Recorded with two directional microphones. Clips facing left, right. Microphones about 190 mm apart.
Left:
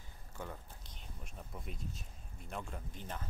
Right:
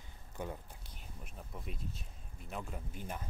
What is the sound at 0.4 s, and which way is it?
Speech, 15° right (ahead or behind).